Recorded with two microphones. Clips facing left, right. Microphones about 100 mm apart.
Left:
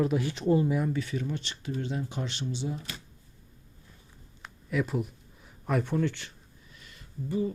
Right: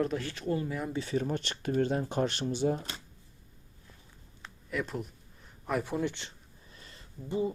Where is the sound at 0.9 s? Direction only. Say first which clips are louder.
Right 1 dB; 30° right (ahead or behind); by 2.8 s 50° right (ahead or behind).